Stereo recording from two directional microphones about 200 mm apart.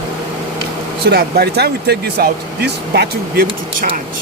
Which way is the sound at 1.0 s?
55° right (ahead or behind).